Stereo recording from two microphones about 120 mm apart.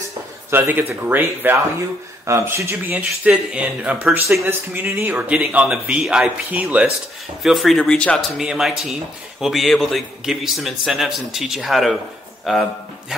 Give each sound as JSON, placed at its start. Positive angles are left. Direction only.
{"t": 0.5, "sound": "speech", "side_deg": -15}
{"t": 7.4, "sound": "speech", "side_deg": 0}
{"t": 8.4, "sound": "speech", "side_deg": -5}